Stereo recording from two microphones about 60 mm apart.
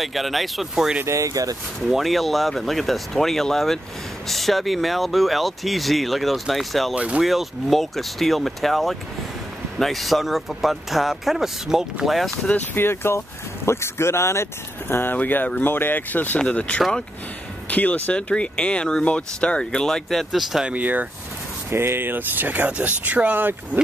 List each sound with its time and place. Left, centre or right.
0.0 s speech: centre
1.0 s speech: right
1.9 s speech: centre
7.0 s speech: right
7.2 s speech: centre
12.7 s speech: left
15.1 s speech: left; by 20.2 s centre
20.6 s speech: right
21.6 s speech: right